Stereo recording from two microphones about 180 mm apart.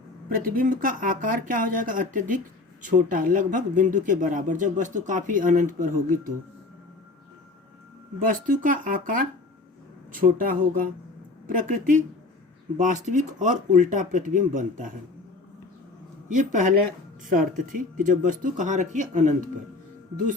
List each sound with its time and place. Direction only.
0.3 s speech: 50° right (ahead or behind)
8.2 s speech: 50° right (ahead or behind)
16.3 s speech: 45° right (ahead or behind)